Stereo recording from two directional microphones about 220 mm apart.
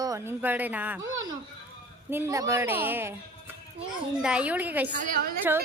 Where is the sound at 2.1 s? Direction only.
10° right (ahead or behind).